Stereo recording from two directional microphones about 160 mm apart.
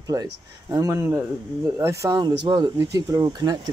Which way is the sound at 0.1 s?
20° right (ahead or behind).